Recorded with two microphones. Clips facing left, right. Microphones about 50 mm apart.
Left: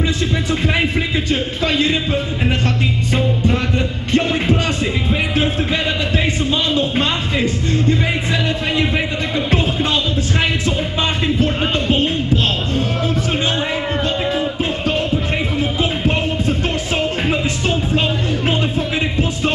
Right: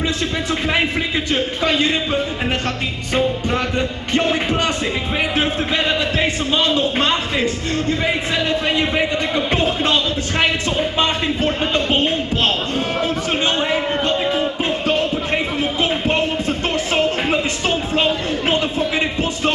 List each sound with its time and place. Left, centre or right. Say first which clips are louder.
1.3 s a man's voice: right 1 dB; centre
3.4 s music: left 2 dB; centre
4.1 s music: left 2 dB; centre
5.1 s music: even; right
9.3 s music: even; centre
13.6 s a sound: right 1 dB; centre
14.6 s music: right 1 dB; centre
18.5 s music: right 3 dB; centre